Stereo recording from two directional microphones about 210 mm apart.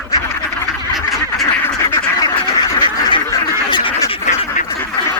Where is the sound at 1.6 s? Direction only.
10° left (ahead or behind).